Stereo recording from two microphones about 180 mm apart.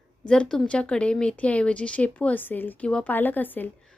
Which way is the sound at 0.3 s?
5° left (ahead or behind).